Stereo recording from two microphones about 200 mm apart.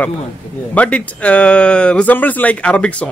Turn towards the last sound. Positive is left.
turn(degrees=5)  # may be behind; listen again after turning